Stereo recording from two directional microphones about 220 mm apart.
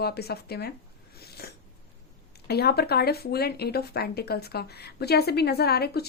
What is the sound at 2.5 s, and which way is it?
Speech, 45° left (ahead or behind).